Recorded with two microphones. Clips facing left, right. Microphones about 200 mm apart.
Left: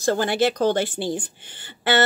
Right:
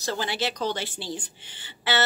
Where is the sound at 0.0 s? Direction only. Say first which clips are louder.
Left 9 dB; 50° left (ahead or behind).